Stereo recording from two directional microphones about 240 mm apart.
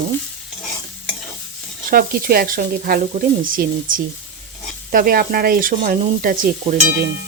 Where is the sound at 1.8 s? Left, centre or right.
Right.